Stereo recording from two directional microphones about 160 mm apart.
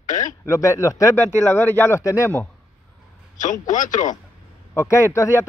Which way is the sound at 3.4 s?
50° left (ahead or behind).